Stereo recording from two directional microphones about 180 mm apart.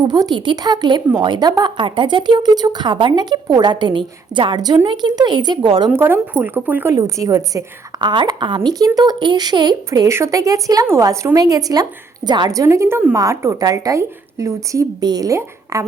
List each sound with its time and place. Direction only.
0.0 s a woman's voice: 25° right (ahead or behind)
6.0 s a woman's voice: 10° right (ahead or behind)